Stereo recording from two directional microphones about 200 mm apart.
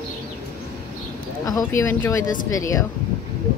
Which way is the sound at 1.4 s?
15° left (ahead or behind).